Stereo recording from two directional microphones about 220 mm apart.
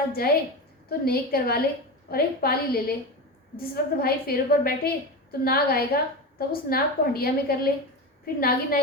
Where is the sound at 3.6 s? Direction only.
45° left (ahead or behind).